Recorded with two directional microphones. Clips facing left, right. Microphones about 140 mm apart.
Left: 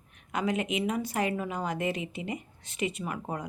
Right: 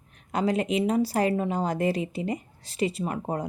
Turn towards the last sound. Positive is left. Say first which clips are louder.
# right 5 dB
turn(degrees=-35)  # may be behind; listen again after turning